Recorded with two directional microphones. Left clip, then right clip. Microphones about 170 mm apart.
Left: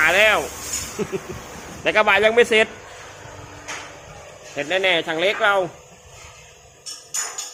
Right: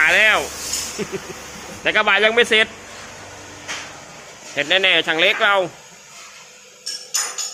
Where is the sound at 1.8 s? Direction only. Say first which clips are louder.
Even; 5° left (ahead or behind).